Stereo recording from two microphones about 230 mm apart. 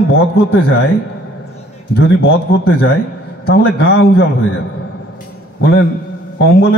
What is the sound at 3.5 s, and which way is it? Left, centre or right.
Speech, left.